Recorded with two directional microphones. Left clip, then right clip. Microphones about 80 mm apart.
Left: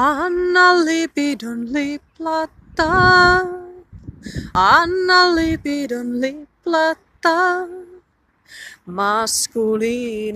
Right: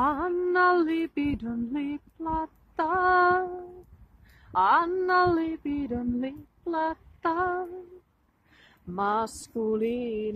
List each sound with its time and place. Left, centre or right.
0.0 s music: left
0.5 s female singing: left
4.5 s speech: left
5.0 s female singing: left
6.2 s music: left
8.9 s speech: centre
9.2 s a sound: centre